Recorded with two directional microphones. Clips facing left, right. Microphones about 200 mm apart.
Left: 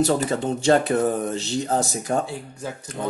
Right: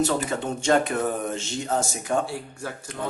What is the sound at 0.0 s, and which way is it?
Speech, 35° left (ahead or behind).